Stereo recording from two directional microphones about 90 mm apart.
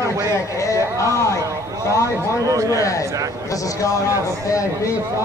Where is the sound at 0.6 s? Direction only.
35° left (ahead or behind).